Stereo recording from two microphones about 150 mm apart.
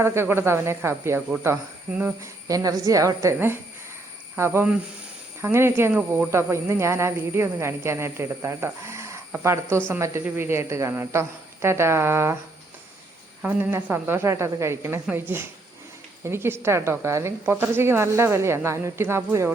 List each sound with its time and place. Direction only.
0.0 s a woman's voice: 15° right (ahead or behind)
6.3 s a woman's voice: 20° right (ahead or behind)
13.4 s a woman's voice: 15° right (ahead or behind)